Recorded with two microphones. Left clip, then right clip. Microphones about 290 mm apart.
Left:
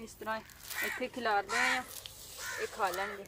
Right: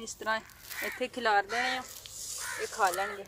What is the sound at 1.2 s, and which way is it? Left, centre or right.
Speech, right.